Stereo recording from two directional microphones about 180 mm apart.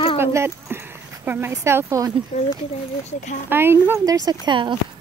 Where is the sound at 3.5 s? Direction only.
10° right (ahead or behind).